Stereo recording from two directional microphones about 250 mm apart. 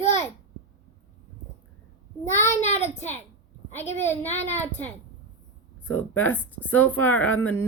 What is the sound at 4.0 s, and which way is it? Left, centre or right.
Speech, centre.